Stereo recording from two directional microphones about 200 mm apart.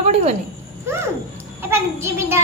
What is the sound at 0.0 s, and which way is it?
Speech, 35° right (ahead or behind).